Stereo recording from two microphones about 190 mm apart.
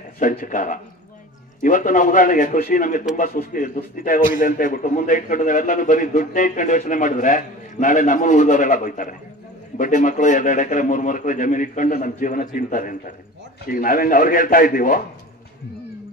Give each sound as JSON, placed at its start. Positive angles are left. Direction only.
{"t": 0.2, "sound": "a man's voice", "side_deg": 45}